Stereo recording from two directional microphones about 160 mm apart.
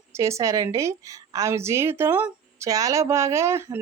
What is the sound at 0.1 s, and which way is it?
A woman's voice, 20° right (ahead or behind).